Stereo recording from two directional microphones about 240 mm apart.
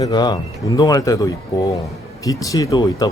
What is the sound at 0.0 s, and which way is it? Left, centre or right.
Speech, centre.